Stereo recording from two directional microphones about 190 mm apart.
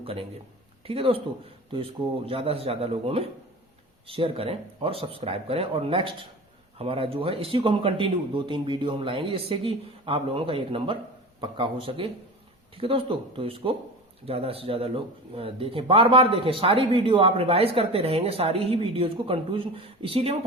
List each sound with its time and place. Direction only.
0.0 s a man's voice: 30° right (ahead or behind)